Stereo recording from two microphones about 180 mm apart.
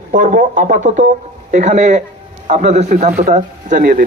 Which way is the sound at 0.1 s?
45° right (ahead or behind).